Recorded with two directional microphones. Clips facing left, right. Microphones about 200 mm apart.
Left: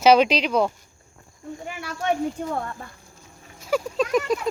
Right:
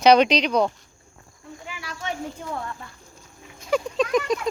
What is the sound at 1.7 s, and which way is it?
Speech, 55° left (ahead or behind).